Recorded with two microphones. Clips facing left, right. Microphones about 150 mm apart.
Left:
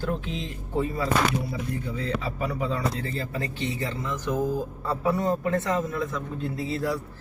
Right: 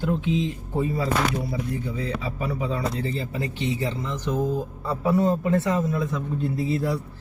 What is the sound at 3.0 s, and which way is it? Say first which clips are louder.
Speech: right 3 dB; 20° right (ahead or behind).